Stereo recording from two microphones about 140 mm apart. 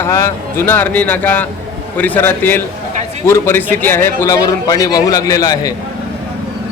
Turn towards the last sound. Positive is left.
turn(degrees=25)  # may be behind; listen again after turning